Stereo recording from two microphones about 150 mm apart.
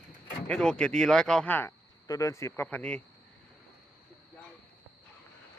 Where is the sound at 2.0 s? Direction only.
25° left (ahead or behind).